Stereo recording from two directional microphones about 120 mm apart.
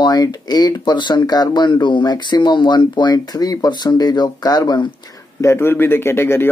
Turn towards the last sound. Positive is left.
turn(degrees=20)  # may be behind; listen again after turning